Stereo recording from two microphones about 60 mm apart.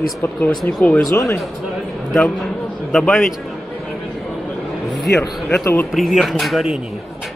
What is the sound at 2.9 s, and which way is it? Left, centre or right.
Speech, centre.